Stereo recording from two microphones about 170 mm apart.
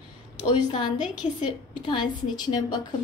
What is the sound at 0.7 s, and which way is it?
A woman's voice, 25° left (ahead or behind).